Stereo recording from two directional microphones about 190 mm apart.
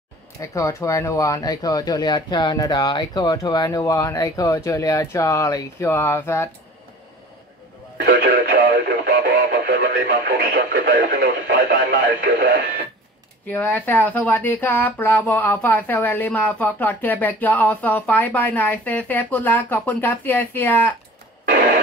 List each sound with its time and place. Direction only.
0.4 s speech: 15° left (ahead or behind)
8.0 s speech: 50° right (ahead or behind)
13.5 s speech: 10° left (ahead or behind)